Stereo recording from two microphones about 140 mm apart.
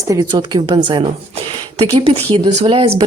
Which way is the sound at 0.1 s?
25° right (ahead or behind).